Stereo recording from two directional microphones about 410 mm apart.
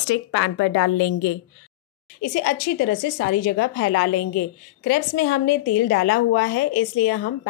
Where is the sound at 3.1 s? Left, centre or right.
Left.